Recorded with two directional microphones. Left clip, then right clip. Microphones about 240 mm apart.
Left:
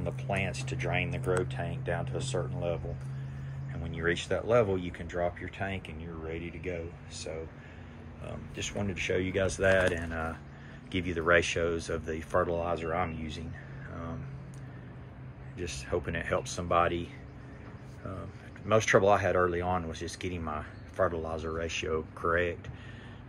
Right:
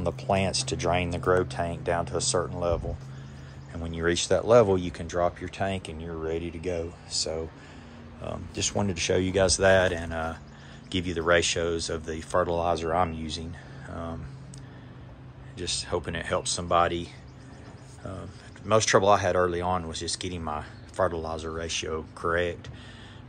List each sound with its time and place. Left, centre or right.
0.0 s speech: centre
3.8 s speech: centre
8.2 s speech: centre
13.8 s a sound: centre
15.5 s speech: centre
18.7 s speech: centre